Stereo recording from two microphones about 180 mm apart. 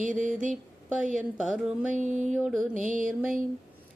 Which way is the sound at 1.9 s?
40° right (ahead or behind).